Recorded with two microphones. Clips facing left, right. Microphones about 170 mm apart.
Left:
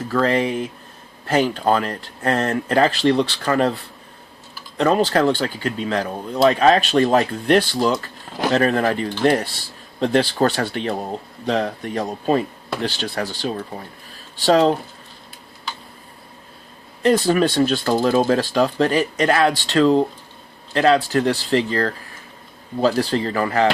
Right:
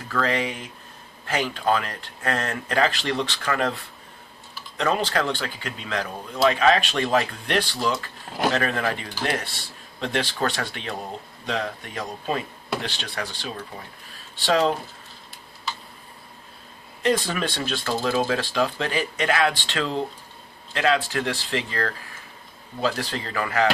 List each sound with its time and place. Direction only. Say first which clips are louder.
0.1 s speech: left 6 dB; 35° left (ahead or behind)
4.8 s speech: left 7 dB; 35° left (ahead or behind)
17.0 s speech: left 7 dB; 40° left (ahead or behind)